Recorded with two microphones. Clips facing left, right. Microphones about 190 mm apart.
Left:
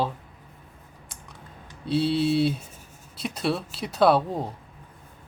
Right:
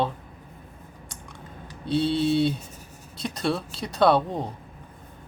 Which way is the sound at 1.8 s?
Centre (ahead or behind).